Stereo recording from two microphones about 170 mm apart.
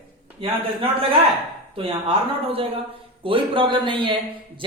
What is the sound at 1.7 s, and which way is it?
A woman's voice, 35° right (ahead or behind).